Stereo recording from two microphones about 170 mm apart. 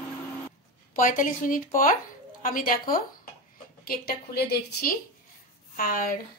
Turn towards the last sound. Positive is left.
turn(degrees=55)  # may be behind; listen again after turning